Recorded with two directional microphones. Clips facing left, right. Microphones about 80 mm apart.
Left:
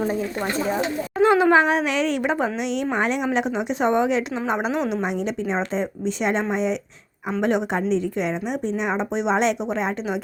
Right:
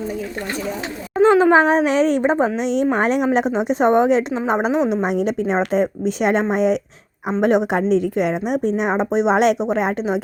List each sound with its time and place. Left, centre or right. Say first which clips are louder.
1.2 s a woman's voice: right 4 dB; right
1.5 s a woman's voice: right 4 dB; right
3.0 s a woman's voice: right 5 dB; right
4.7 s a woman's voice: right 5 dB; centre
5.0 s a woman's voice: right 5 dB; right